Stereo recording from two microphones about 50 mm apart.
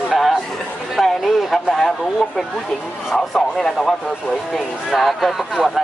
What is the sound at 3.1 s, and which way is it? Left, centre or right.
Speech, centre.